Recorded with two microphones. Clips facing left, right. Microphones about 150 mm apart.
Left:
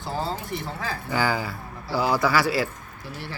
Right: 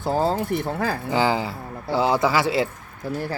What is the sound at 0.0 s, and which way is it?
Speech, 50° right (ahead or behind).